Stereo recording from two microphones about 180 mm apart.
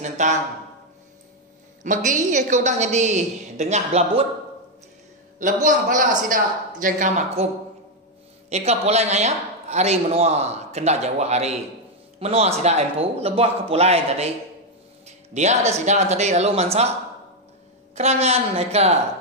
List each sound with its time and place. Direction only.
0.0 s speech: 40° right (ahead or behind)
2.0 s speech: 45° right (ahead or behind)
5.4 s a man's voice: 45° right (ahead or behind)
8.5 s speech: 35° right (ahead or behind)
15.0 s a sound: 40° right (ahead or behind)
15.8 s speech: 40° right (ahead or behind)
17.9 s speech: 35° right (ahead or behind)